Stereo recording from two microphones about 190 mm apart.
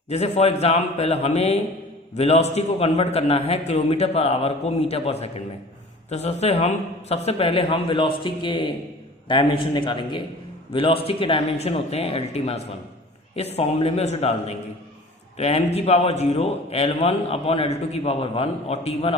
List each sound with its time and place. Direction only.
0.1 s a man's voice: 35° left (ahead or behind)